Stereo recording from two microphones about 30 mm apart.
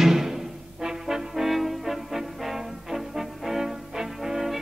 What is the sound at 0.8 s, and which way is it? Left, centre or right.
Trombone, centre.